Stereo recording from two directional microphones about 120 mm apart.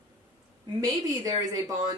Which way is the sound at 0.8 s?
30° right (ahead or behind).